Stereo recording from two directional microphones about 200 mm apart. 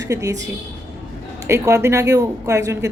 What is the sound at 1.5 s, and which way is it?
A woman's voice, 15° right (ahead or behind).